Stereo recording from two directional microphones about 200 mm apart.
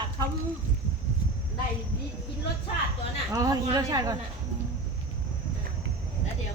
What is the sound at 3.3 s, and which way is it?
Speech, 15° right (ahead or behind).